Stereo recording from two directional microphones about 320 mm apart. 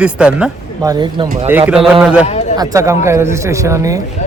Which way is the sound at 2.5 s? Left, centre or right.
Centre.